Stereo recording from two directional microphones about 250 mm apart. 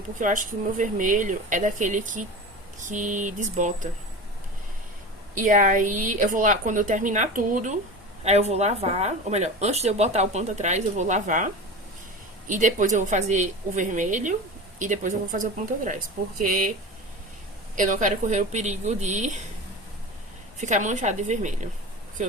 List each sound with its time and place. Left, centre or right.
0.2 s a woman's voice: right
5.3 s a woman's voice: right
17.7 s speech: right
20.6 s speech: right